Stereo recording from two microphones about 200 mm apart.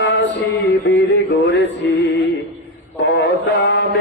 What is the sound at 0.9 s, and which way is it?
Music, 65° left (ahead or behind).